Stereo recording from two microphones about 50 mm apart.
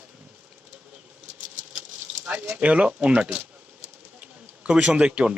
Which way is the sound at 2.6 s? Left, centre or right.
Right.